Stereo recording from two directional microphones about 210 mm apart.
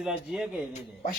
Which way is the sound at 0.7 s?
35° left (ahead or behind).